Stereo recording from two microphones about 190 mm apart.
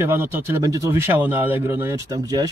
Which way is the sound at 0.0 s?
10° right (ahead or behind).